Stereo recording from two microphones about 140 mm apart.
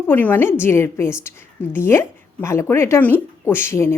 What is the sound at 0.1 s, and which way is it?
A woman's voice, 15° left (ahead or behind).